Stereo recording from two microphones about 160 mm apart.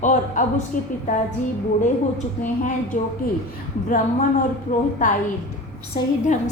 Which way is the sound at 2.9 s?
55° left (ahead or behind).